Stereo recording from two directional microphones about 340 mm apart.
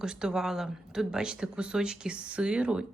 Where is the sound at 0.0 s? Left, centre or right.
Centre.